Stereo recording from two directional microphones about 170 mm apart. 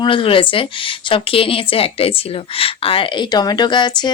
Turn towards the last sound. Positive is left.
turn(degrees=25)  # may be behind; listen again after turning